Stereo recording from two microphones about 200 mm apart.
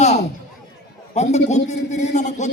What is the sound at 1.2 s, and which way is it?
A man's voice, 35° left (ahead or behind).